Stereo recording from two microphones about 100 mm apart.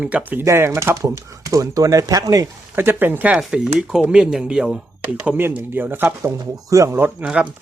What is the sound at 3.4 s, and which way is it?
Speech, 5° right (ahead or behind).